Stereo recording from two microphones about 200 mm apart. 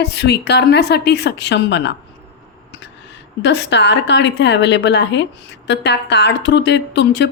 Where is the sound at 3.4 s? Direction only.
60° left (ahead or behind).